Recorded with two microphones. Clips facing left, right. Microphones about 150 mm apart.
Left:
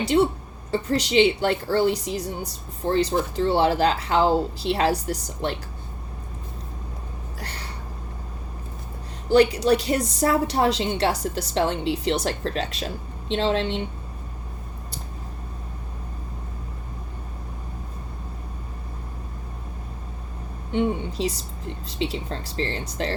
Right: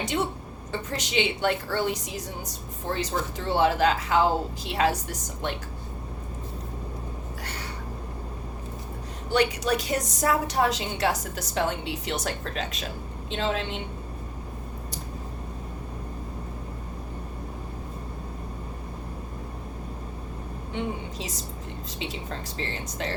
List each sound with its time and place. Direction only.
0.7 s a woman's voice: 35° left (ahead or behind)
9.3 s a woman's voice: 30° left (ahead or behind)
21.2 s a woman's voice: 30° left (ahead or behind)